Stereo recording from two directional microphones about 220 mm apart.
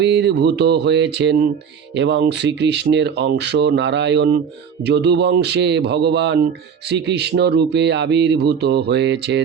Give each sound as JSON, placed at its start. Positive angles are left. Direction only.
{"t": 0.0, "sound": "speech", "side_deg": -50}